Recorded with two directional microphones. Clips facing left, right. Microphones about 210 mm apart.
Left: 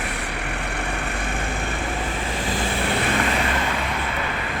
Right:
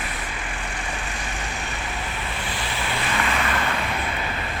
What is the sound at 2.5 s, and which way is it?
Vehicle, 50° left (ahead or behind).